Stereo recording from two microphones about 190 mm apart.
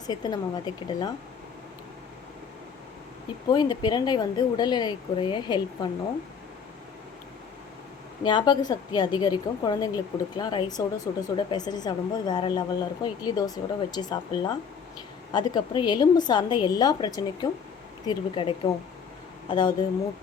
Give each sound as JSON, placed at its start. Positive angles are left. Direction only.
{"t": 0.1, "sound": "a woman's voice", "side_deg": 20}
{"t": 3.5, "sound": "a woman's voice", "side_deg": 20}
{"t": 8.2, "sound": "a woman's voice", "side_deg": 25}